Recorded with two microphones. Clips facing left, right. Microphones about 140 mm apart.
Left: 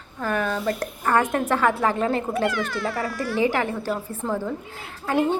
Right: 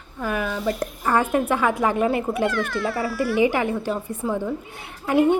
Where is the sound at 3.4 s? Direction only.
15° right (ahead or behind).